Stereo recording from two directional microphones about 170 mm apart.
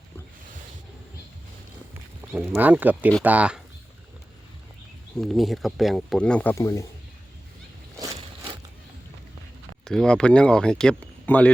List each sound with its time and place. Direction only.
2.5 s speech: 10° right (ahead or behind)
5.1 s speech: centre (ahead or behind); by 6.8 s 20° left (ahead or behind)
7.9 s a sound: 20° right (ahead or behind)
9.8 s speech: 5° left (ahead or behind)